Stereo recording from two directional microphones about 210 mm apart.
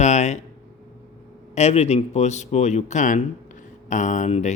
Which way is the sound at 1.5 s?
30° left (ahead or behind).